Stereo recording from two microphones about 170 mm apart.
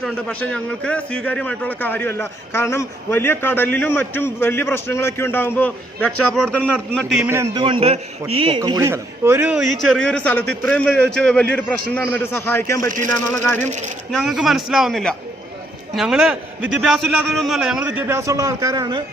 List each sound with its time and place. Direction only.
0.0 s a man's voice: 5° left (ahead or behind)
7.5 s a man's voice: 30° right (ahead or behind); by 13.7 s 15° left (ahead or behind)
13.7 s speech: 45° right (ahead or behind)
14.1 s a man's voice: centre (ahead or behind); by 19.0 s 25° right (ahead or behind)